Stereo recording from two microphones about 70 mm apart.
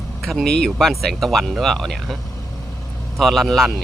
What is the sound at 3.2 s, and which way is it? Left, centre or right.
Speech, centre.